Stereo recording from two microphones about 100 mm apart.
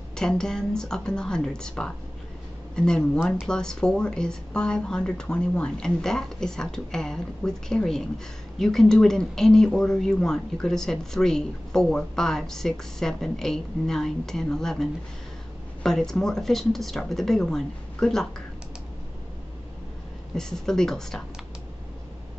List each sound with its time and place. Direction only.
0.1 s speech: 5° left (ahead or behind)
20.3 s speech: 5° left (ahead or behind)